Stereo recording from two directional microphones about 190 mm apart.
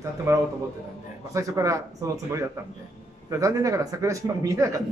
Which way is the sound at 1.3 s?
15° right (ahead or behind).